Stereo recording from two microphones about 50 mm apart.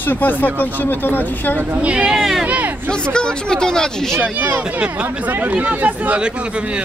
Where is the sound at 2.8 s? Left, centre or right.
Centre.